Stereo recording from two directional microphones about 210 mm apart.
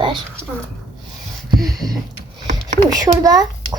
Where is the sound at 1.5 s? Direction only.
20° right (ahead or behind).